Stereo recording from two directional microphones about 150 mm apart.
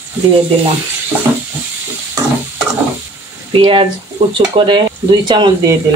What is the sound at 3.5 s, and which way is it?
Speech, 35° right (ahead or behind).